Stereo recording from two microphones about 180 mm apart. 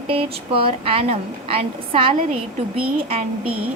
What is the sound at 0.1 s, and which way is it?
A woman's voice, 30° right (ahead or behind).